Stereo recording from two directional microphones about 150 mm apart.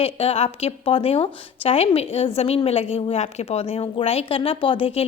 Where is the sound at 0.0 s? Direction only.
45° left (ahead or behind).